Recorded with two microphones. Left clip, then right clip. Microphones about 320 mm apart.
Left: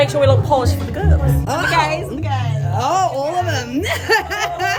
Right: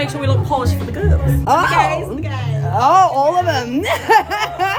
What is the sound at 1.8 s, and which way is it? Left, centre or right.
Speech, centre.